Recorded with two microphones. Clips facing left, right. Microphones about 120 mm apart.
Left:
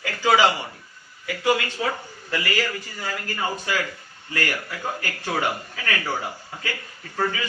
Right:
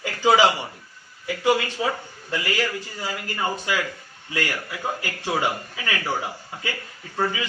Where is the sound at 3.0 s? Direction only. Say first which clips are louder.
Even; 20° right (ahead or behind).